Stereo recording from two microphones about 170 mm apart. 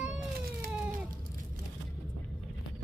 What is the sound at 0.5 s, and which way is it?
Cat, 60° right (ahead or behind).